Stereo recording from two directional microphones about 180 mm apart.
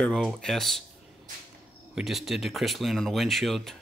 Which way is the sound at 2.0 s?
Centre (ahead or behind).